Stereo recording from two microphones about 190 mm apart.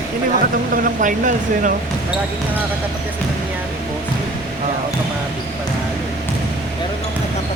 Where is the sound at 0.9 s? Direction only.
45° right (ahead or behind).